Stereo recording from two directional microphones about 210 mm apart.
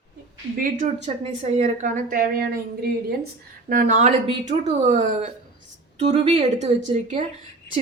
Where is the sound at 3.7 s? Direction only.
35° right (ahead or behind).